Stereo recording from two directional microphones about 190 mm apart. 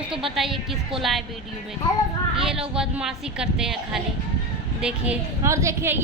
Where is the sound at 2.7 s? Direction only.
5° right (ahead or behind).